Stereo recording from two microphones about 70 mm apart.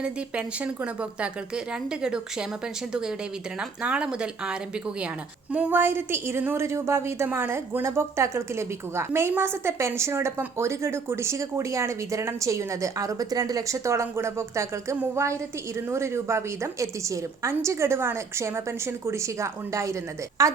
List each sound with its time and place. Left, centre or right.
0.0 s a woman's voice: centre
3.8 s a woman's voice: centre
5.7 s a woman's voice: right